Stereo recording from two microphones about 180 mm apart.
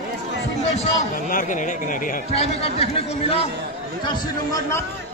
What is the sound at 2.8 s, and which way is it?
Speech, 35° left (ahead or behind).